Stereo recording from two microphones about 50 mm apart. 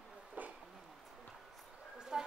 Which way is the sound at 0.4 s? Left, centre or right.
Right.